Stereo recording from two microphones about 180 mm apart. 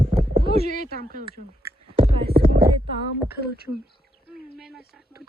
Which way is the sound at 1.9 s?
30° right (ahead or behind).